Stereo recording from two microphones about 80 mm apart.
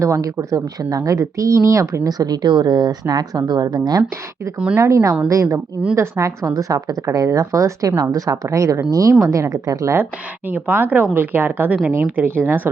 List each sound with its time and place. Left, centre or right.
0.0 s speech: right
4.8 s a woman's voice: right
10.5 s speech: right